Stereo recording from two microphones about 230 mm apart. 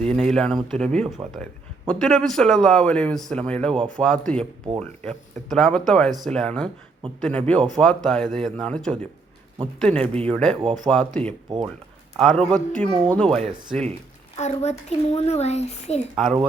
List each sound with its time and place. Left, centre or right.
0.1 s speech: centre
14.3 s a child's voice: left
16.1 s speech: centre